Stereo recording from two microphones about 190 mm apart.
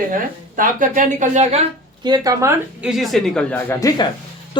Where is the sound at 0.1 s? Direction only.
45° right (ahead or behind).